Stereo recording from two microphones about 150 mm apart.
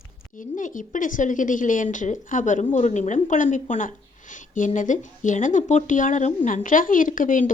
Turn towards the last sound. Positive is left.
turn(degrees=60)  # may be behind; listen again after turning